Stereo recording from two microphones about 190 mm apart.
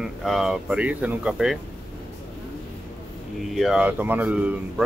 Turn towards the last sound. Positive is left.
turn(degrees=-5)  # may be behind; listen again after turning